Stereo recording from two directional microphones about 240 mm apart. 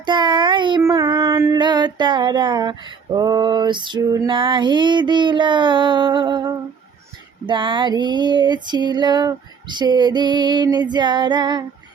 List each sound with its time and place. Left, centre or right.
0.0 s child singing: centre
7.4 s female singing: centre